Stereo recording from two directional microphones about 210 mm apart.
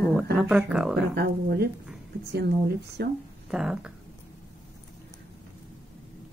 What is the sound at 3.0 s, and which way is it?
Speech, 50° right (ahead or behind).